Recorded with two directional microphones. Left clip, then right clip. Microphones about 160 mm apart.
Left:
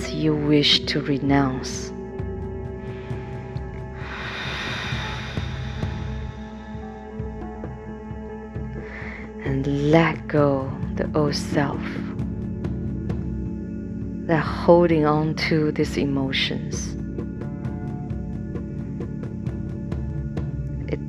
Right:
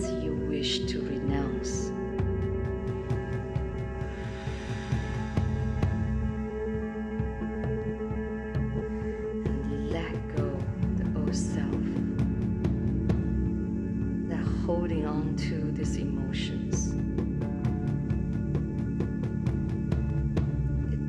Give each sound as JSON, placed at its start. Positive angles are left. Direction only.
{"t": 0.1, "sound": "speech", "side_deg": 40}
{"t": 9.8, "sound": "music", "side_deg": 50}
{"t": 12.2, "sound": "music", "side_deg": 0}
{"t": 14.3, "sound": "speech", "side_deg": 45}